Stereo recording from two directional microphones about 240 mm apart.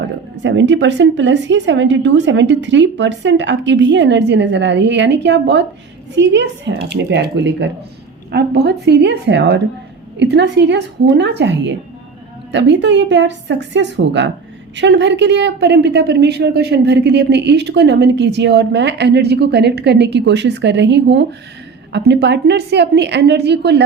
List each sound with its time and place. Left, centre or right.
0.4 s a woman's voice: right